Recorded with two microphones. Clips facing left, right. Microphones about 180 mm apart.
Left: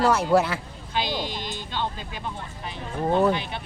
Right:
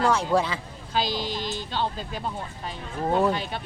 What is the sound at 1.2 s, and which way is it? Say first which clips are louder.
Sheep: right 3 dB; 40° right (ahead or behind).